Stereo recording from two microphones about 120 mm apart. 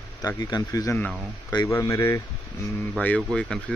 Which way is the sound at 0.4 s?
35° left (ahead or behind).